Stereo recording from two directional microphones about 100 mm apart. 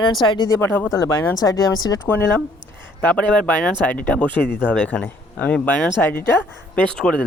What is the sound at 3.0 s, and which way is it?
Speech, 15° left (ahead or behind).